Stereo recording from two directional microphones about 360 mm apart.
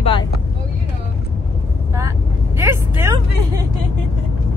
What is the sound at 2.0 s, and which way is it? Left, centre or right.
Vehicle, centre.